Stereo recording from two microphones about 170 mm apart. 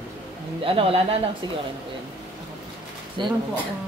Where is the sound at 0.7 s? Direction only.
35° right (ahead or behind).